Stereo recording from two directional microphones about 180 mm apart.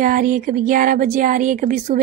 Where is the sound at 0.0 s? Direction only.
50° right (ahead or behind).